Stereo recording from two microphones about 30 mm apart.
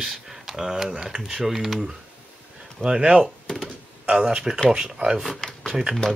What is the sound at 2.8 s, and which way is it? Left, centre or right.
Speech, right.